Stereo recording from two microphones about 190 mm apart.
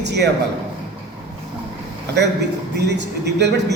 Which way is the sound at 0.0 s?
65° right (ahead or behind).